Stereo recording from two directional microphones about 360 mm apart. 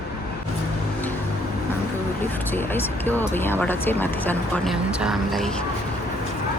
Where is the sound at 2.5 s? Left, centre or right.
Centre.